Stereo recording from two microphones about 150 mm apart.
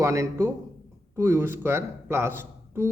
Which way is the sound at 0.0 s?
20° right (ahead or behind).